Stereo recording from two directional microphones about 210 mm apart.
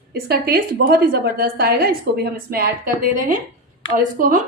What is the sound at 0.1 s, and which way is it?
A woman's voice, 50° right (ahead or behind).